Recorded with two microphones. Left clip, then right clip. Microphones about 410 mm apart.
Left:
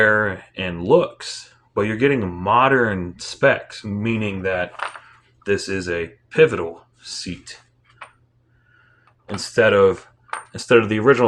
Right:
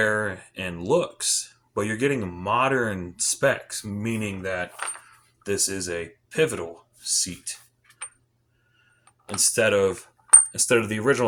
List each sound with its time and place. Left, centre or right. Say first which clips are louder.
0.0 s speech: left 7 dB; right
9.3 s speech: left 5 dB; right